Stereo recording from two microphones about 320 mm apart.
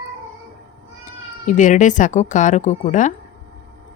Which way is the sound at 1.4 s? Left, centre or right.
Left.